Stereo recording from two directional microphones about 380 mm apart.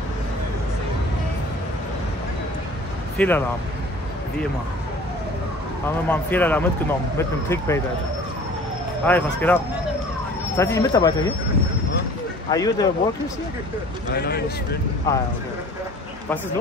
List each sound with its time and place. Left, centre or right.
3.2 s speech: centre
6.0 s speech: centre
9.0 s speech: centre
10.6 s speech: centre
12.4 s speech: centre
14.1 s speech: left
15.1 s speech: centre